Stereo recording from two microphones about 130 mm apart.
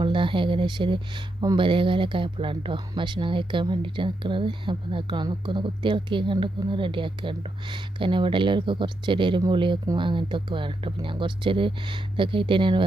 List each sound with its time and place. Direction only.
0.0 s speech: 40° right (ahead or behind)